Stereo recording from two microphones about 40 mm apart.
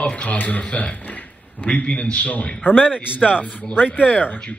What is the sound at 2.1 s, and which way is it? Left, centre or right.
A man's voice, left.